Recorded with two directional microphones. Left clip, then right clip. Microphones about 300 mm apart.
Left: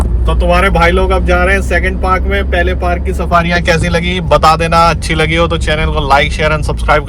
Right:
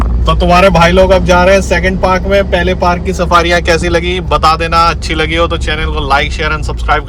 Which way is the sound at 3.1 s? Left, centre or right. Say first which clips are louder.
Right 2 dB; centre.